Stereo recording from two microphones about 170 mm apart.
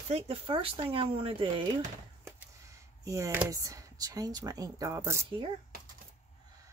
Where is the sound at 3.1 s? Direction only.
20° right (ahead or behind).